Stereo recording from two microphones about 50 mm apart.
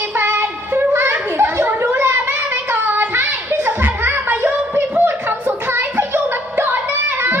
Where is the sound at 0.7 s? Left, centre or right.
Right.